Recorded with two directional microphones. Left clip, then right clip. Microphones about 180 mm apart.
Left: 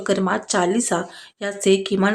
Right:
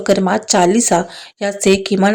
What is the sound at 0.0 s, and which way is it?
Speech, 30° right (ahead or behind).